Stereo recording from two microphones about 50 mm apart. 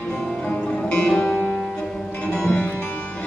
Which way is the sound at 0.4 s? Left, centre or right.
Centre.